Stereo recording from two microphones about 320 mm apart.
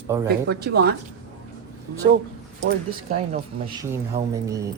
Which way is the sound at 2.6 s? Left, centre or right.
Right.